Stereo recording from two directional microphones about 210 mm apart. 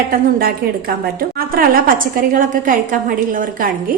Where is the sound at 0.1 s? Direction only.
45° right (ahead or behind).